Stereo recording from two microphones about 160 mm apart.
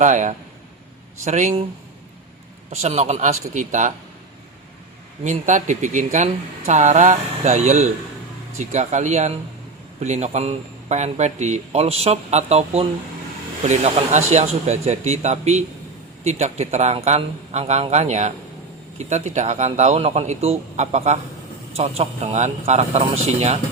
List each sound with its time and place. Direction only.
0.0 s speech: 50° right (ahead or behind)
2.6 s speech: 45° right (ahead or behind)
5.2 s speech: 50° right (ahead or behind)